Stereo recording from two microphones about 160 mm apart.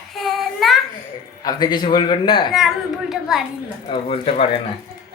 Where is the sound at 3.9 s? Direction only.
35° left (ahead or behind).